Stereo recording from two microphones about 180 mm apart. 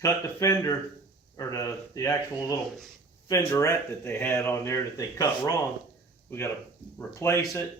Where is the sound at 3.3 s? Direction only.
15° left (ahead or behind).